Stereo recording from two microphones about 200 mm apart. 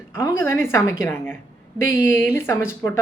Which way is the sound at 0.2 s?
10° left (ahead or behind).